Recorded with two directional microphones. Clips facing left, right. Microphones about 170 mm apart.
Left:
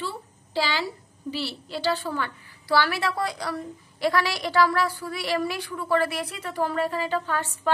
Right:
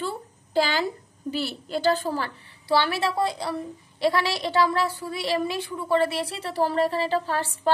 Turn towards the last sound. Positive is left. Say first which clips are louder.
# right 2 dB
turn(degrees=-35)  # may be behind; listen again after turning